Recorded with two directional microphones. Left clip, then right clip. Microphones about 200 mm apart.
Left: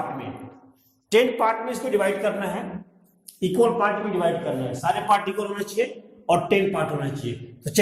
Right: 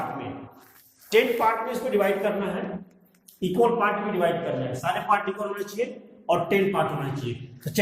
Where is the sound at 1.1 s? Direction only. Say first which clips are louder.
Left 1 dB; 30° left (ahead or behind).